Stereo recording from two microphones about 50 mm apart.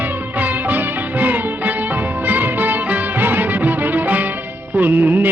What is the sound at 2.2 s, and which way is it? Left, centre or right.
Music of bollywood, right.